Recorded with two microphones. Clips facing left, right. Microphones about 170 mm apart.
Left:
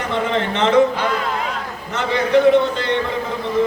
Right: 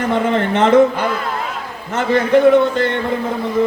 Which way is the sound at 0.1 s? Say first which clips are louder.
Right 3 dB; 50° right (ahead or behind).